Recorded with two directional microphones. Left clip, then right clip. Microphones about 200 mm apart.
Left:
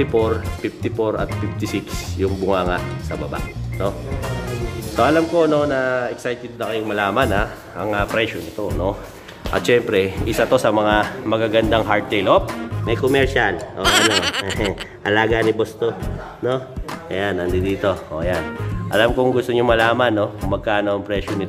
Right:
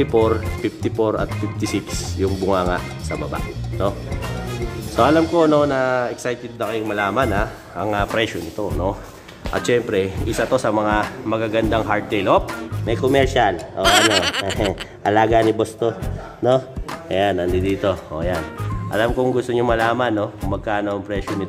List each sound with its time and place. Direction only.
0.0 s speech: 15° right (ahead or behind)
2.1 s speech: centre (ahead or behind)
3.8 s speech: 15° right (ahead or behind)
17.1 s speech: 15° right (ahead or behind)